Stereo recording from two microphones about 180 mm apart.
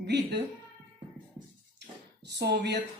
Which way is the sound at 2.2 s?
65° right (ahead or behind).